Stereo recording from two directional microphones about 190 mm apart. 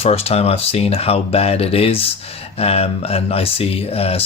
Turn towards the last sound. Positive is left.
turn(degrees=30)  # may be behind; listen again after turning